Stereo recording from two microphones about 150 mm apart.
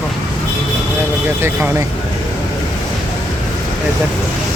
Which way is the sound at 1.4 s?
10° right (ahead or behind).